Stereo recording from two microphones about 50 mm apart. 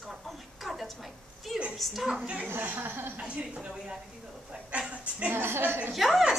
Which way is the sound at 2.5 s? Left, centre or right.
Right.